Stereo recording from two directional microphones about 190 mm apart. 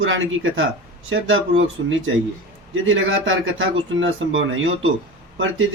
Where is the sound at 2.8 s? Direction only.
90° right.